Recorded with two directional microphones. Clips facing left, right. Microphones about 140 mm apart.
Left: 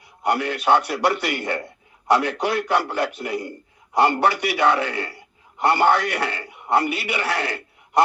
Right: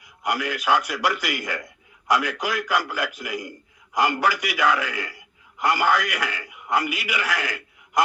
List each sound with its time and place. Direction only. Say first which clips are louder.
0.0 s a man's voice: left 4 dB; 30° left (ahead or behind)